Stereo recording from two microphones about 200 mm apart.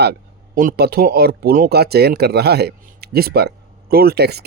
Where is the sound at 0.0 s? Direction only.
50° right (ahead or behind).